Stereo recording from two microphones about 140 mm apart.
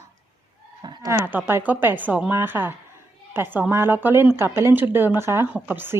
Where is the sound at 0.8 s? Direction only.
25° right (ahead or behind).